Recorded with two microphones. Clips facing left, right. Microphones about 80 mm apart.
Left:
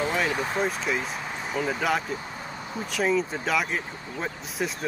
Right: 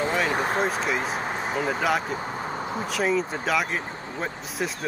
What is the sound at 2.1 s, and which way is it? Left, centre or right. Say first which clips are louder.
Vehicle: right 6 dB; right.